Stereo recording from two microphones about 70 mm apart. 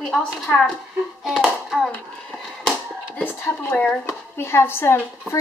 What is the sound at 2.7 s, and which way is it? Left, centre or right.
Hands, centre.